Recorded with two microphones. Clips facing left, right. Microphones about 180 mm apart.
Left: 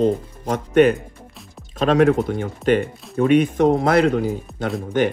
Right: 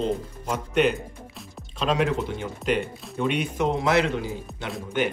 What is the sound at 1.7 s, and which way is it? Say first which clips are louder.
Speech: left 8 dB; 50° left (ahead or behind).